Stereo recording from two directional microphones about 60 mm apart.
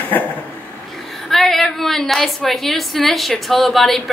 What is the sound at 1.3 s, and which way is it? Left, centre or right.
A woman's voice, centre.